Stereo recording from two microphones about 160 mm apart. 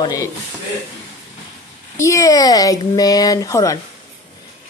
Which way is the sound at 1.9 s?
20° left (ahead or behind).